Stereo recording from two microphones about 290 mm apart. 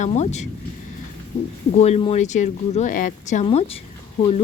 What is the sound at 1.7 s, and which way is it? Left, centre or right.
A woman's voice, left.